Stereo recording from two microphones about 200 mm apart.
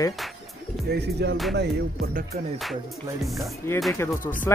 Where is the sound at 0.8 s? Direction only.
55° right (ahead or behind).